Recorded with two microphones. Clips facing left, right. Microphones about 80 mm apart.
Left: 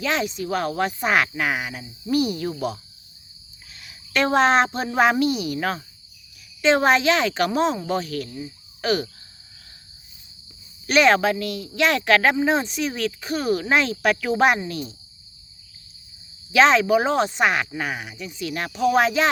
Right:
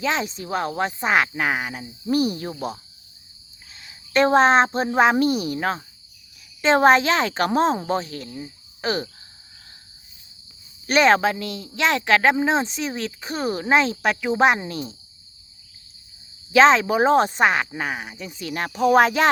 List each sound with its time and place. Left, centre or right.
0.0 s speech: right
3.8 s speech: right
5.2 s speech: right
5.5 s speech: right
6.6 s speech: right
10.8 s speech: right
16.5 s speech: right